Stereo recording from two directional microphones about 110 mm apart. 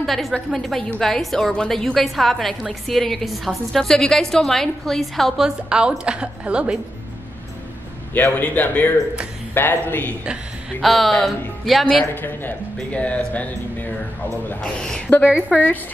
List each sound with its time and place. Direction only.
0.0 s a woman's voice: centre (ahead or behind)
8.1 s speech: 15° left (ahead or behind)
10.8 s a woman's voice: centre (ahead or behind)
12.1 s speech: 15° left (ahead or behind)